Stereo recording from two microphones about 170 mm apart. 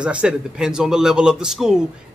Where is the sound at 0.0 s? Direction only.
5° right (ahead or behind).